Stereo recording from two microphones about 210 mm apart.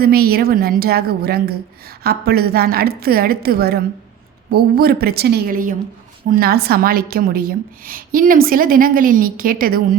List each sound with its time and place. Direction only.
0.0 s a woman's voice: 45° right (ahead or behind)